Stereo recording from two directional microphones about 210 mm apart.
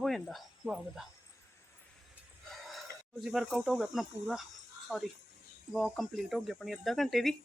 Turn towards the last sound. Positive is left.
turn(degrees=0)  # may be behind; listen again after turning